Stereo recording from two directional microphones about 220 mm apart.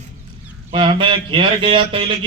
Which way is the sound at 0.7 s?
20° right (ahead or behind).